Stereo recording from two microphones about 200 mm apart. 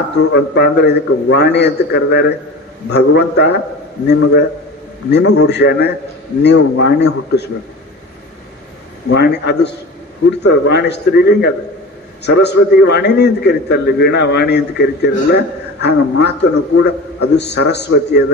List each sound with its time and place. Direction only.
0.2 s a man's voice: 55° left (ahead or behind)
9.1 s a man's voice: 55° left (ahead or behind)